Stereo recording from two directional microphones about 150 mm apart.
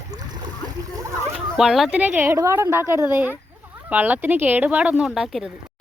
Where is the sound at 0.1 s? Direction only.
25° right (ahead or behind).